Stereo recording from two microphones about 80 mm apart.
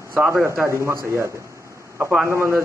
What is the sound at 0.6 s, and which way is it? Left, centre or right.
A man's voice, right.